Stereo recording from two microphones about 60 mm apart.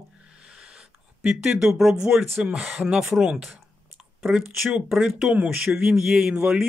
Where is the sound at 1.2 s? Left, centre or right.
Centre.